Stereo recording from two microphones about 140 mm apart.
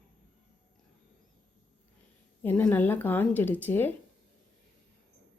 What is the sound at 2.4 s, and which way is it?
A woman's voice, 10° left (ahead or behind).